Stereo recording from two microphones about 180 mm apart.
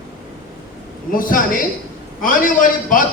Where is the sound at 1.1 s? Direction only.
50° left (ahead or behind).